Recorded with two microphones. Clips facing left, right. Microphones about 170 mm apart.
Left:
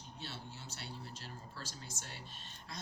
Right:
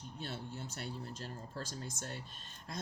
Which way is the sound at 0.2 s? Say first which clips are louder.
Right 6 dB; 50° right (ahead or behind).